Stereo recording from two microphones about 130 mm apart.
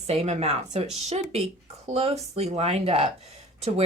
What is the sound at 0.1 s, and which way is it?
Speech, 55° right (ahead or behind).